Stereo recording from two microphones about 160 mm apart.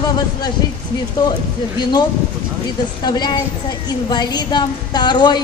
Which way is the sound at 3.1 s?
25° left (ahead or behind).